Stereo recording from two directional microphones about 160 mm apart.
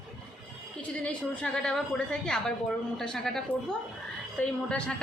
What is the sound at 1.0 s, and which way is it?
A woman's voice, 5° left (ahead or behind).